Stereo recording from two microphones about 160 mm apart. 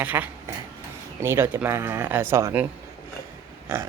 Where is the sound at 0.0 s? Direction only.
10° right (ahead or behind).